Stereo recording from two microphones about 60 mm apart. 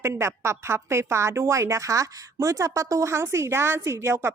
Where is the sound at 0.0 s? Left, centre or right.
Right.